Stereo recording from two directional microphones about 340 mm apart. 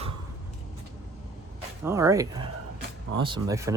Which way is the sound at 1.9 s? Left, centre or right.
Centre.